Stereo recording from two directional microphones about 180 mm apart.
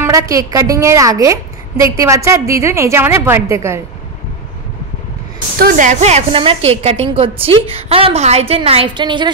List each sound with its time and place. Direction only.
0.0 s a woman's voice: 15° right (ahead or behind)
5.6 s a woman's voice: 45° right (ahead or behind); by 9.3 s 25° right (ahead or behind)